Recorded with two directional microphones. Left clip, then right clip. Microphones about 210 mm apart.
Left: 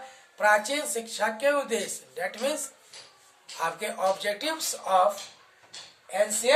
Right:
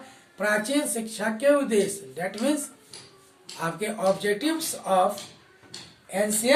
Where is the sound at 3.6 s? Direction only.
10° left (ahead or behind).